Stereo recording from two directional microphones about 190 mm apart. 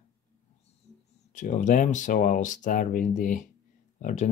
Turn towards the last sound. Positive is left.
turn(degrees=35)  # may be behind; listen again after turning